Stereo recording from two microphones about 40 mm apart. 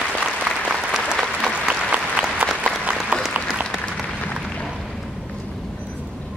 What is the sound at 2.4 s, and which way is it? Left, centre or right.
Applause, right.